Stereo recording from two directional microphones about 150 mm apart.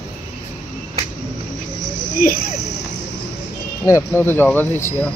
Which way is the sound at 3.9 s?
15° left (ahead or behind).